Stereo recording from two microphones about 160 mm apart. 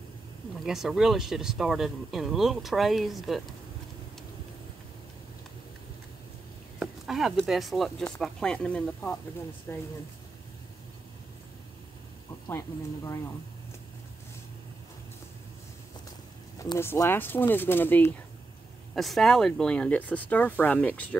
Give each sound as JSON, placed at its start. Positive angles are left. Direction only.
{"t": 0.7, "sound": "speech", "side_deg": -5}
{"t": 6.8, "sound": "speech", "side_deg": 0}
{"t": 12.4, "sound": "speech", "side_deg": 15}
{"t": 16.5, "sound": "speech", "side_deg": 20}
{"t": 18.9, "sound": "speech", "side_deg": 0}